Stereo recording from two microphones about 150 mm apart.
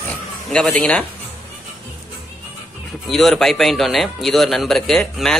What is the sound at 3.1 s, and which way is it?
Speech, centre (ahead or behind).